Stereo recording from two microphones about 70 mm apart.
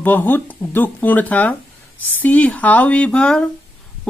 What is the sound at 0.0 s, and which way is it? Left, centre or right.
Speech, left.